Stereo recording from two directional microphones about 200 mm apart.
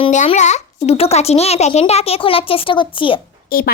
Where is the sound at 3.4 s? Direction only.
45° left (ahead or behind).